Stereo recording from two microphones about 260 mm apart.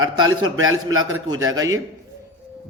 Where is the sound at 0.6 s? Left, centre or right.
Right.